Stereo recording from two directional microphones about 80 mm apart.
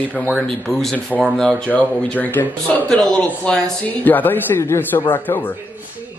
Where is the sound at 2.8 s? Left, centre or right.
Centre.